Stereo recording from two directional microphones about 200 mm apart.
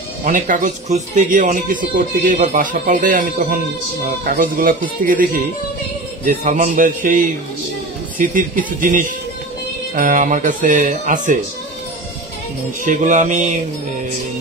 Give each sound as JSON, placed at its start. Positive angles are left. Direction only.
{"t": 0.2, "sound": "speech", "side_deg": -40}
{"t": 12.8, "sound": "speech", "side_deg": -40}